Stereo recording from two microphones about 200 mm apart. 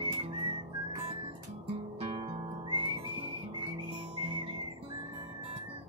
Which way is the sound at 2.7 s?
25° right (ahead or behind).